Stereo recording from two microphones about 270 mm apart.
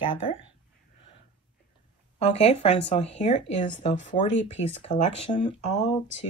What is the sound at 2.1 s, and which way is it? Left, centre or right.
Speech, left.